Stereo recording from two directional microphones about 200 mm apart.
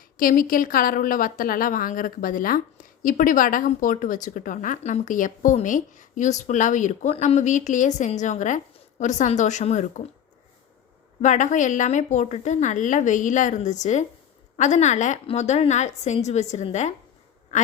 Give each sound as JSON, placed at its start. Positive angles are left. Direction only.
{"t": 0.2, "sound": "a woman's voice", "side_deg": 45}
{"t": 11.2, "sound": "a woman's voice", "side_deg": 40}
{"t": 17.5, "sound": "quack", "side_deg": 35}